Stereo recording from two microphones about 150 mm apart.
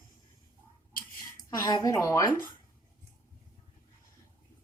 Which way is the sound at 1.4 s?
25° left (ahead or behind).